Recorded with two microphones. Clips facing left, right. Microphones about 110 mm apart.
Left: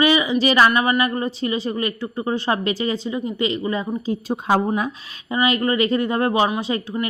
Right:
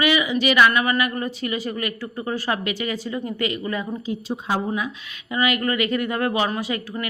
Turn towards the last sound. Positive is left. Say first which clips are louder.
# left 3 dB
turn(degrees=25)  # may be behind; listen again after turning